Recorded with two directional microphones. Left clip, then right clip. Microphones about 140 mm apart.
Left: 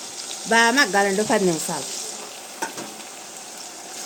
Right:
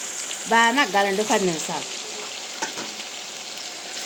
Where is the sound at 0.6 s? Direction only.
90° left.